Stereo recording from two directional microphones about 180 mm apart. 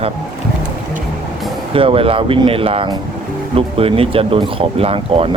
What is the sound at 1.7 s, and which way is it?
Speech, 30° right (ahead or behind).